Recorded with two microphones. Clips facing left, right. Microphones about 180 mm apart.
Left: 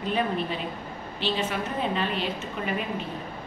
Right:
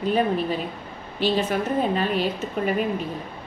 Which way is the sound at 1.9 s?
45° right (ahead or behind).